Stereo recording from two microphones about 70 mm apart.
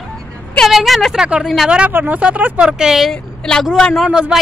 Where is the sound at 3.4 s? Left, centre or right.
Centre.